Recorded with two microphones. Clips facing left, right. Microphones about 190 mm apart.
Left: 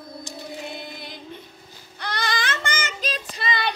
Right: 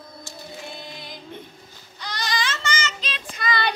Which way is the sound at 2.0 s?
55° left (ahead or behind).